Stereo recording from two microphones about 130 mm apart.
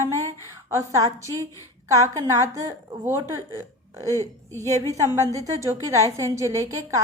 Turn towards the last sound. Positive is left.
turn(degrees=-25)  # may be behind; listen again after turning